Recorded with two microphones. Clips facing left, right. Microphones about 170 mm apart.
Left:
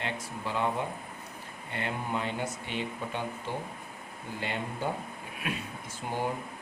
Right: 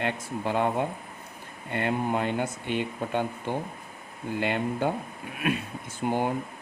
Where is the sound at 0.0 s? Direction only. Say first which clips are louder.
Right 6 dB; 55° right (ahead or behind).